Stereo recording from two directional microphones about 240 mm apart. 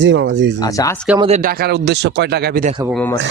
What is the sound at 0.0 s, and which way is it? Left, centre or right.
Speech, right.